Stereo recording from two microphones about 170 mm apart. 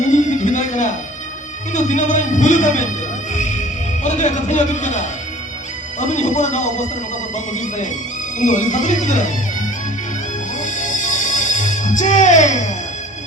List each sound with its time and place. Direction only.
0.1 s music: 45° left (ahead or behind)
10.6 s music: 50° left (ahead or behind)